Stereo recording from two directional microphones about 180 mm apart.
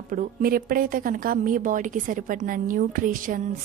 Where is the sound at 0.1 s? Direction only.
50° right (ahead or behind).